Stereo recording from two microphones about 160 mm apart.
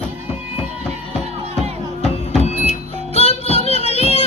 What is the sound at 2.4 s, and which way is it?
Vehicle, 45° left (ahead or behind).